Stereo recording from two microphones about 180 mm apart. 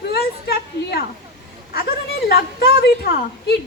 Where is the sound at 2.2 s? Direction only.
60° left (ahead or behind).